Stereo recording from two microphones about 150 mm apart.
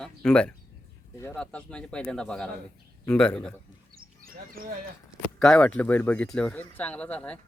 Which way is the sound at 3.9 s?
75° right (ahead or behind).